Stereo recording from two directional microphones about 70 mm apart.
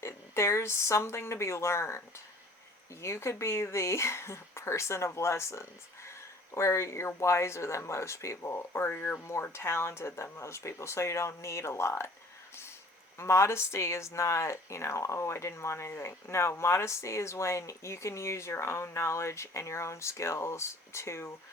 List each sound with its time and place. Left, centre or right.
0.0 s speech: left
9.2 s speech: left
13.1 s speech: left